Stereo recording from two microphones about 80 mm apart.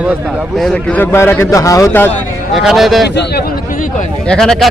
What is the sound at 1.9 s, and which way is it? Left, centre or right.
Speech, left.